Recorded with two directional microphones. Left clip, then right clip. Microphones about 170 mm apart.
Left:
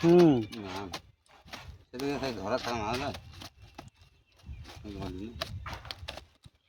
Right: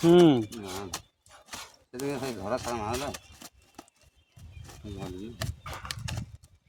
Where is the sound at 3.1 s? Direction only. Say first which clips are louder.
Right 1 dB; 20° right (ahead or behind).